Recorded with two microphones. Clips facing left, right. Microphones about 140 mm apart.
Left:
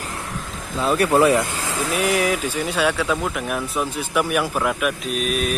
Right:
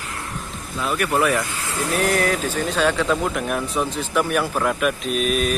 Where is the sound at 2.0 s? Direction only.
10° left (ahead or behind).